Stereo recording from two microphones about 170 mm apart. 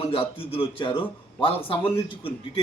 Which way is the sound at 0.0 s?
30° left (ahead or behind).